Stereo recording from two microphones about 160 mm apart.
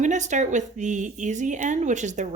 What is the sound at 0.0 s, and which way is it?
Speech, 50° right (ahead or behind).